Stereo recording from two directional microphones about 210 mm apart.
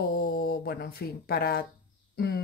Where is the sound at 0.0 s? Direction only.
45° left (ahead or behind).